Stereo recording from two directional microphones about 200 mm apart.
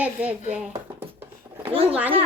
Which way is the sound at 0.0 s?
5° right (ahead or behind).